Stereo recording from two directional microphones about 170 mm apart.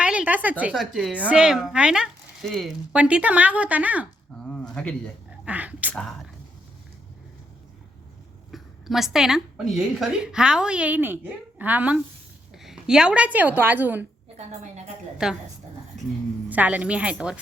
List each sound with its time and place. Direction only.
0.0 s a woman's voice: 5° right (ahead or behind)
4.4 s speech: 5° left (ahead or behind)
5.5 s a woman's voice: 10° right (ahead or behind)
5.9 s a woman's voice: 5° left (ahead or behind)
8.5 s a woman's voice: centre (ahead or behind)
14.3 s a woman's voice: 40° right (ahead or behind)
15.2 s a woman's voice: 5° right (ahead or behind)
15.9 s a sound: centre (ahead or behind)
16.5 s a woman's voice: 10° right (ahead or behind)